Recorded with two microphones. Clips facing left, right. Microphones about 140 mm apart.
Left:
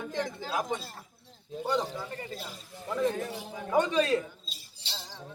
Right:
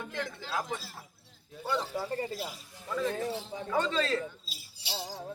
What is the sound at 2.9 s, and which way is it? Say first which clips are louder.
Speech: left 2 dB; 15° left (ahead or behind).